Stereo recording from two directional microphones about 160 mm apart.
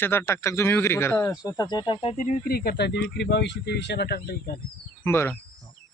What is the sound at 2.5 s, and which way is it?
Speech, 80° left.